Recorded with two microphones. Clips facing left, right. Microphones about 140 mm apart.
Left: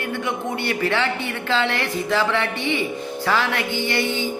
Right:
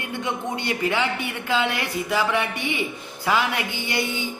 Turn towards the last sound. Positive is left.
turn(degrees=-15)  # may be behind; listen again after turning